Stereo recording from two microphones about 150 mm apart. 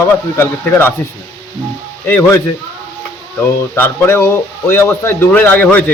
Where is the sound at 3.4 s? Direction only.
15° left (ahead or behind).